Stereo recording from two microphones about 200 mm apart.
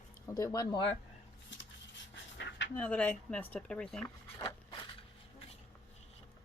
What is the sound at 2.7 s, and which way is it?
Speech, 5° left (ahead or behind).